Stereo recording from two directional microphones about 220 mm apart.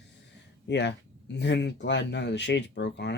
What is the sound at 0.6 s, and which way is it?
Speech, 50° left (ahead or behind).